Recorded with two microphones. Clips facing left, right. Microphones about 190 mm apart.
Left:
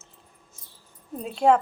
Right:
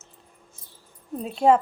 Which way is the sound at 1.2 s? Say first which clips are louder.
Right 1 dB; 5° right (ahead or behind).